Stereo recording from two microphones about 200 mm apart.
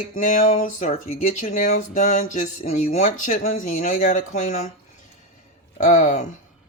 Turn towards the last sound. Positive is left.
turn(degrees=40)  # may be behind; listen again after turning